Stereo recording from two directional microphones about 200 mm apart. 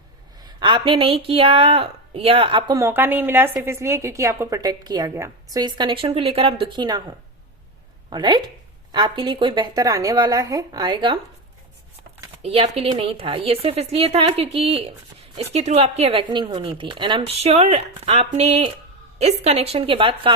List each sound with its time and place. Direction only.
0.3 s a woman's voice: 20° right (ahead or behind)
8.1 s a woman's voice: 20° right (ahead or behind)
12.4 s a woman's voice: 30° right (ahead or behind)